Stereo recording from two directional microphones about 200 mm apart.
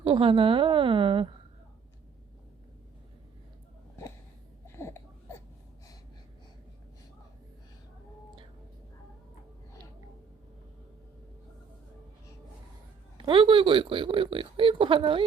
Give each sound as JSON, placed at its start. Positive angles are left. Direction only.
{"t": 0.0, "sound": "speech", "side_deg": -25}
{"t": 4.6, "sound": "a sound", "side_deg": 15}
{"t": 13.1, "sound": "speech", "side_deg": -25}